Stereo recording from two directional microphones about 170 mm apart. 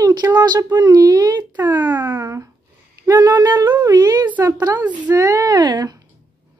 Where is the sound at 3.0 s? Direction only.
20° right (ahead or behind).